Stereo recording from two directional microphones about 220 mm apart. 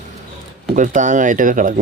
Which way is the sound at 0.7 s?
35° right (ahead or behind).